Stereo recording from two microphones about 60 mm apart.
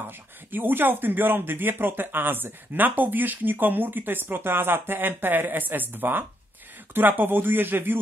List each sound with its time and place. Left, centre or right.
0.0 s speech: right